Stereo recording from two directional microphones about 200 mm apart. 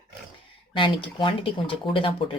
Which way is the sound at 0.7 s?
25° left (ahead or behind).